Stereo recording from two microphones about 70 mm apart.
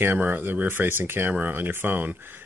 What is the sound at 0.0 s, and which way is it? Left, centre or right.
Speech, right.